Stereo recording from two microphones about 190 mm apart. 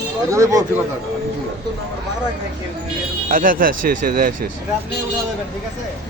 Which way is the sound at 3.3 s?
45° right (ahead or behind).